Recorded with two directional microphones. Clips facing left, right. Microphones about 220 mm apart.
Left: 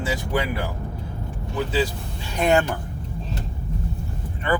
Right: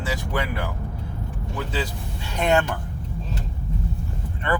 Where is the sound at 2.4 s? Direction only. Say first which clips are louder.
Left 2 dB; 10° left (ahead or behind).